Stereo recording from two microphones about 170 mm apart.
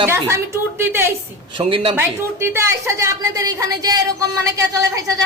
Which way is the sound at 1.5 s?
30° right (ahead or behind).